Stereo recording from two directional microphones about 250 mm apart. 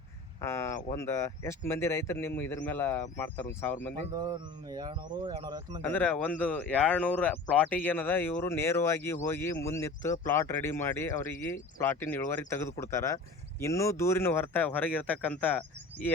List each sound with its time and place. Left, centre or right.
0.4 s speech: centre
4.1 s speech: centre
5.8 s speech: centre